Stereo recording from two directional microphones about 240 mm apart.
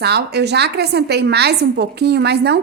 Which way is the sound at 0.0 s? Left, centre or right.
Right.